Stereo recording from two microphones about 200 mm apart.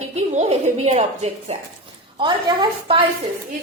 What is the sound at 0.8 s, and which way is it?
A woman's voice, 35° right (ahead or behind).